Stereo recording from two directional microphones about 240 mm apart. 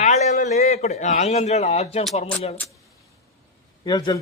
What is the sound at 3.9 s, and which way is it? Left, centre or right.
Speech, centre.